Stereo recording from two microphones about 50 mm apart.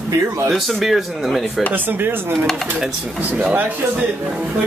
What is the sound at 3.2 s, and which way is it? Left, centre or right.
Speech, right.